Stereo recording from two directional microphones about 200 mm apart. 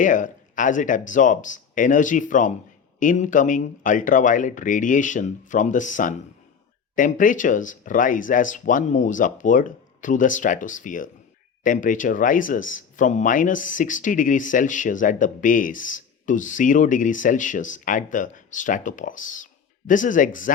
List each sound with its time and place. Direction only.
0.0 s speech: 40° left (ahead or behind)